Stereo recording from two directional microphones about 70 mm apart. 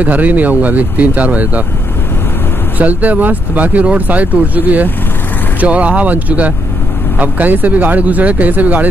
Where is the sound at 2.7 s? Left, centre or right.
Right.